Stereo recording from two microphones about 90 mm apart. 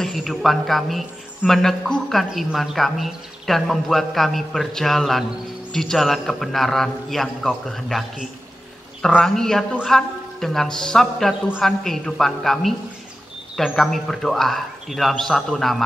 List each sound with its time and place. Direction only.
0.0 s a man's voice: centre (ahead or behind)
13.7 s a man's voice: 5° left (ahead or behind)